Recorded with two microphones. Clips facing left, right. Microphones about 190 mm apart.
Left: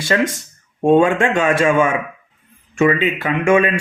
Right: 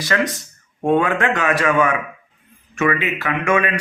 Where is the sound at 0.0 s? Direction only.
25° left (ahead or behind).